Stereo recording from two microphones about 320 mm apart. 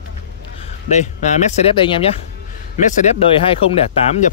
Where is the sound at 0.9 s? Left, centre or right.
Left.